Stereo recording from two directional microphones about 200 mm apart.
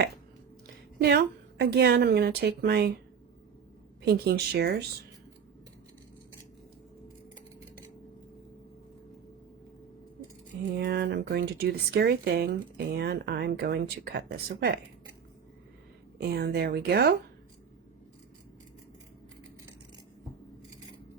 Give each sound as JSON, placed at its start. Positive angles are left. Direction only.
{"t": 1.0, "sound": "speech", "side_deg": -55}
{"t": 4.0, "sound": "speech", "side_deg": -55}
{"t": 10.8, "sound": "speech", "side_deg": -50}
{"t": 16.1, "sound": "speech", "side_deg": -55}